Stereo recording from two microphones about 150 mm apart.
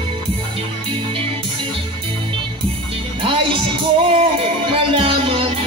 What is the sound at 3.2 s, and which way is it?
Music, 35° right (ahead or behind).